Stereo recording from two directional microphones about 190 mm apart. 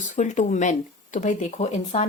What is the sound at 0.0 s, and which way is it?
Speech, 40° left (ahead or behind).